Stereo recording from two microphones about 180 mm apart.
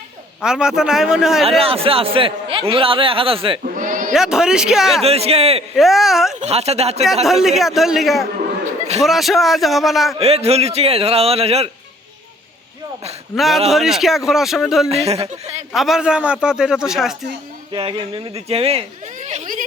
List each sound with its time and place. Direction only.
0.4 s a man's voice: 5° right (ahead or behind)
1.5 s a man's voice: 30° right (ahead or behind)
3.6 s bleat: 45° right (ahead or behind)
4.1 s a man's voice: 5° right (ahead or behind)
5.0 s a man's voice: 35° right (ahead or behind)
5.7 s a man's voice: centre (ahead or behind)
6.4 s a man's voice: 35° right (ahead or behind)
7.3 s a man's voice: centre (ahead or behind)
10.2 s a man's voice: 35° right (ahead or behind)
13.3 s a man's voice: centre (ahead or behind)
14.8 s a man's voice: 35° right (ahead or behind)
15.7 s a man's voice: centre (ahead or behind)
17.7 s speech: 30° right (ahead or behind); by 19.6 s 45° right (ahead or behind)